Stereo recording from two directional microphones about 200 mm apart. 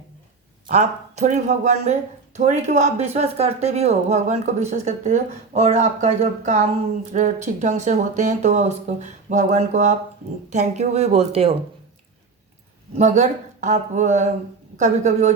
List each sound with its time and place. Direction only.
0.7 s speech: 35° right (ahead or behind)
13.0 s speech: 35° right (ahead or behind)